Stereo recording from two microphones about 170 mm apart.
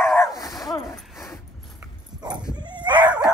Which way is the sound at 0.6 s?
15° left (ahead or behind).